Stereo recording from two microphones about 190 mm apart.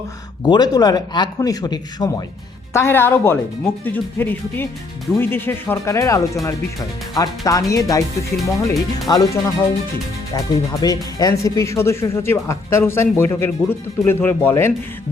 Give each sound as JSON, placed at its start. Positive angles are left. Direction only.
{"t": 0.4, "sound": "speech", "side_deg": 20}